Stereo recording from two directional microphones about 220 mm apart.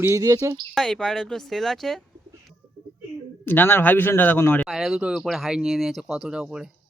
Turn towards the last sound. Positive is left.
turn(degrees=-5)  # may be behind; listen again after turning